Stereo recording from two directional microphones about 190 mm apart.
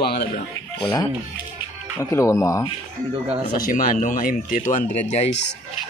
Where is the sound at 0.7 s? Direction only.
25° left (ahead or behind).